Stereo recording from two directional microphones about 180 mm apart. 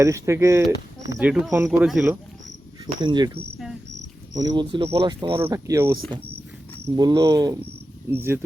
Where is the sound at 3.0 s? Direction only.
25° right (ahead or behind).